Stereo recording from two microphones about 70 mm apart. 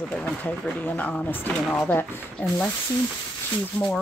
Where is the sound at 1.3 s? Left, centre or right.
Left.